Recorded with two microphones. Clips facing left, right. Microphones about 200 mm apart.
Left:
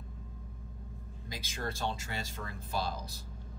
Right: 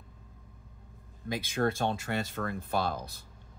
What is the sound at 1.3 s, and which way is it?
Speech, 60° right (ahead or behind).